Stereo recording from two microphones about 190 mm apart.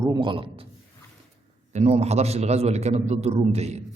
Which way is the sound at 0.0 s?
20° right (ahead or behind).